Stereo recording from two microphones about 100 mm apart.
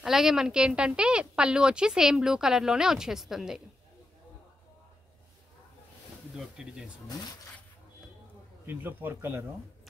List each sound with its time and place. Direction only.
0.0 s a woman's voice: 5° right (ahead or behind)
6.3 s speech: 5° right (ahead or behind)
8.6 s a man's voice: 20° right (ahead or behind)